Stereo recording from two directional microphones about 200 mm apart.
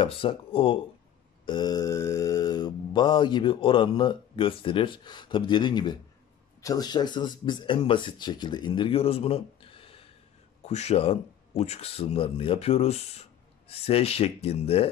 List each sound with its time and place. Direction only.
0.0 s mantra: 25° left (ahead or behind)
10.6 s speech: 35° left (ahead or behind)